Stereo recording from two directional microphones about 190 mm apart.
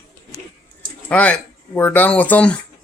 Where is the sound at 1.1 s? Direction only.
5° left (ahead or behind).